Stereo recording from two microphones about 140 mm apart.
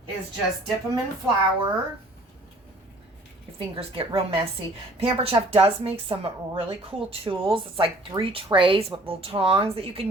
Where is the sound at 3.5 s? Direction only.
40° right (ahead or behind).